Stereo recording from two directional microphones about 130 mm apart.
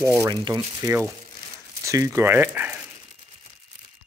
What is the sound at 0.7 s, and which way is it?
Speech, 20° right (ahead or behind).